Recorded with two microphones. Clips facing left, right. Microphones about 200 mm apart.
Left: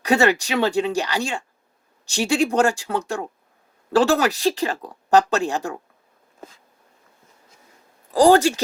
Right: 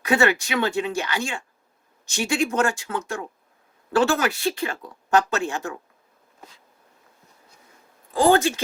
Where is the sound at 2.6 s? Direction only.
35° left (ahead or behind).